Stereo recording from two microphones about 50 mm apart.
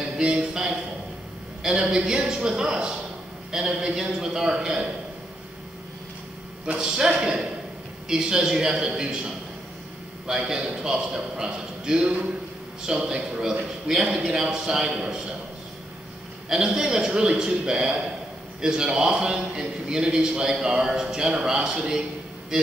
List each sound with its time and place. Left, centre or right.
0.2 s a man's voice: right
6.8 s a man's voice: centre
10.5 s a man's voice: centre
16.4 s a man's voice: centre